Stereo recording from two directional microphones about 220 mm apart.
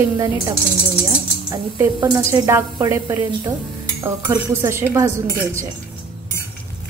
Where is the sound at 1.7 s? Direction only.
10° right (ahead or behind).